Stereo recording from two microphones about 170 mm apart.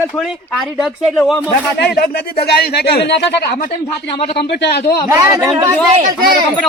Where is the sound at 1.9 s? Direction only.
65° left (ahead or behind).